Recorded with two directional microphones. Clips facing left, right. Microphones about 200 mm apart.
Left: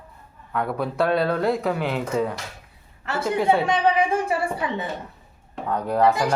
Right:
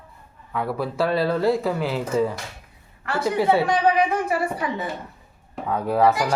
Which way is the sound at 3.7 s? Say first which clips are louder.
Right 1 dB; 25° left (ahead or behind).